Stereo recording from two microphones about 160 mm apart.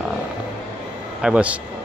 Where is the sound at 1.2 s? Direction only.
5° right (ahead or behind).